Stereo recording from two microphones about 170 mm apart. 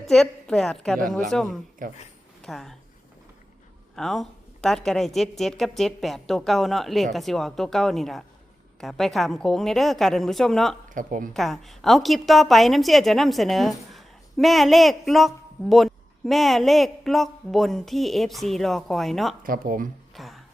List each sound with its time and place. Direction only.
0.1 s a woman's voice: 5° left (ahead or behind)
1.8 s speech: 55° right (ahead or behind)
2.4 s speech: centre (ahead or behind)
3.9 s a woman's voice: centre (ahead or behind)
10.8 s a woman's voice: 50° right (ahead or behind)
11.3 s a woman's voice: centre (ahead or behind)
19.4 s speech: 55° right (ahead or behind)
20.1 s music: centre (ahead or behind)